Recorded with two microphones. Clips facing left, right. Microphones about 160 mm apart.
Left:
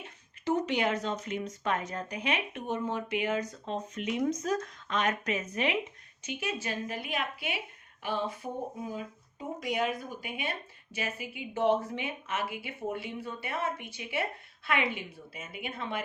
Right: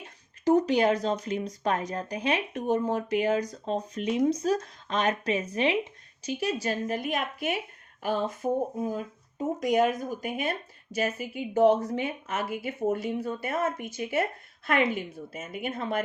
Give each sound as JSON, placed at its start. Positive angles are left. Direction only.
{"t": 0.4, "sound": "speech", "side_deg": -40}